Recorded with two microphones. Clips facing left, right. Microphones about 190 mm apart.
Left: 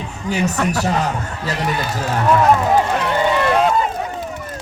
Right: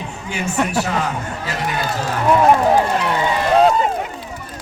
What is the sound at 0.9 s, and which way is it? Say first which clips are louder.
Speech: left 2 dB; 40° left (ahead or behind).